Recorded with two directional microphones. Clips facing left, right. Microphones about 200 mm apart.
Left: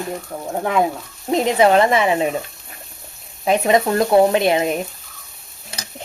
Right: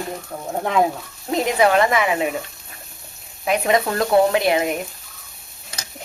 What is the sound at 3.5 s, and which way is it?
A woman's voice, 25° left (ahead or behind).